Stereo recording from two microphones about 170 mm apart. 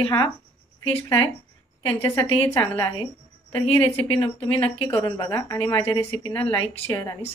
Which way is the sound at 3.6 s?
35° left (ahead or behind).